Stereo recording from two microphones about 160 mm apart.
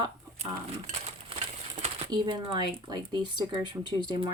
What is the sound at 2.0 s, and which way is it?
Speech, 25° right (ahead or behind).